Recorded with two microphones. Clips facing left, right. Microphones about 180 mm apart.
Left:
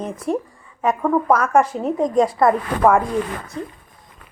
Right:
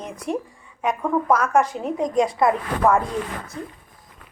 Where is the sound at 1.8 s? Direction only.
40° left (ahead or behind).